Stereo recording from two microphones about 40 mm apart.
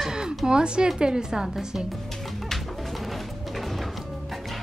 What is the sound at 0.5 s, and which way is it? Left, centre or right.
Speech, right.